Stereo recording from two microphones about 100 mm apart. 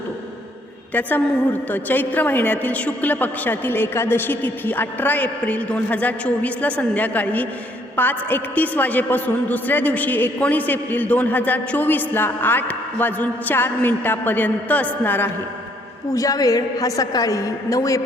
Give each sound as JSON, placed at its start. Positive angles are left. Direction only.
{"t": 0.9, "sound": "a woman's voice", "side_deg": 20}
{"t": 16.1, "sound": "a woman's voice", "side_deg": 35}